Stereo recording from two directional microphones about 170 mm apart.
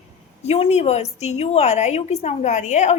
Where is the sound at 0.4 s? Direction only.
40° left (ahead or behind).